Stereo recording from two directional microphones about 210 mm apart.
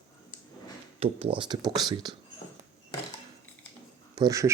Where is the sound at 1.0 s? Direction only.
25° right (ahead or behind).